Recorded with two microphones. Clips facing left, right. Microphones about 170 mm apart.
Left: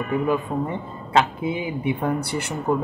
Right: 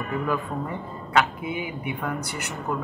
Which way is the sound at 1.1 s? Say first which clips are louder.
Left 3 dB; 30° left (ahead or behind).